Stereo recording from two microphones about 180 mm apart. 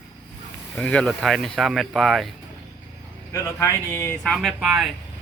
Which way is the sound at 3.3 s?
15° left (ahead or behind).